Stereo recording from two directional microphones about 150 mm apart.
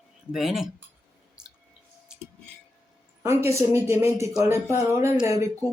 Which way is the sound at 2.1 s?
5° right (ahead or behind).